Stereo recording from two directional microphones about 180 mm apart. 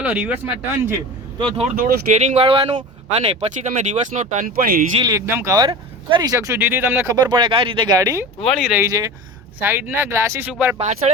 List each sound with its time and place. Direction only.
0.0 s speech: 10° right (ahead or behind)
1.4 s speech: 30° right (ahead or behind); by 4.9 s 50° right (ahead or behind)
5.0 s speech: 15° right (ahead or behind)
8.9 s speech: 20° right (ahead or behind)
10.8 s speech: 40° right (ahead or behind)